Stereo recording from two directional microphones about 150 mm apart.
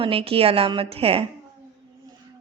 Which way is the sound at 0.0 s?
40° right (ahead or behind).